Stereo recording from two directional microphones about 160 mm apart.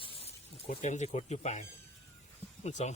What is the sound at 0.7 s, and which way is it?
Speech, 45° left (ahead or behind).